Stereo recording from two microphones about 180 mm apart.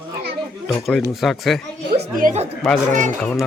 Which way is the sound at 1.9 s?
65° right (ahead or behind).